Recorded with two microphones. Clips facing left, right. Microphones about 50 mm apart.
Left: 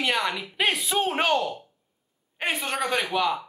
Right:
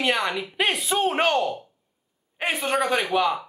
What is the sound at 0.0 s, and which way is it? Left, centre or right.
Speech, centre.